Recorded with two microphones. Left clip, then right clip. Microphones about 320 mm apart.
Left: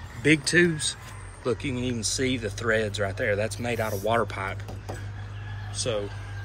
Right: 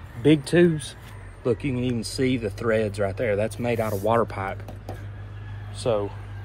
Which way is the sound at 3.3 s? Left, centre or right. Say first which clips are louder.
Right 2 dB; right.